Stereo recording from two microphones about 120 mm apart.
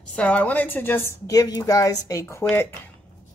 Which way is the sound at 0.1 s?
15° left (ahead or behind).